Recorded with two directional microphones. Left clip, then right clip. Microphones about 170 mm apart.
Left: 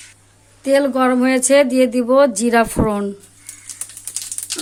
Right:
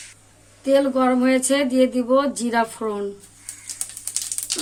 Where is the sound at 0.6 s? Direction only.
45° left (ahead or behind).